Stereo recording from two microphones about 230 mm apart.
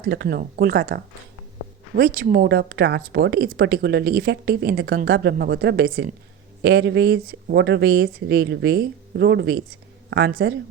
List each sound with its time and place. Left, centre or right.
0.0 s a woman's voice: right